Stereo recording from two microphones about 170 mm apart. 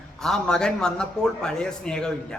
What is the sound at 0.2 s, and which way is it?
A man's voice, 5° left (ahead or behind).